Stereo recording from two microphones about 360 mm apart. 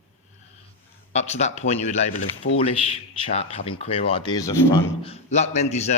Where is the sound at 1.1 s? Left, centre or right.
Centre.